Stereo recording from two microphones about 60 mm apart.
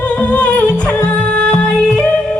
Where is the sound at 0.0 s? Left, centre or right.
Left.